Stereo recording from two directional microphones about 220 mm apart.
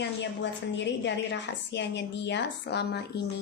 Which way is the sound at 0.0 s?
55° left (ahead or behind).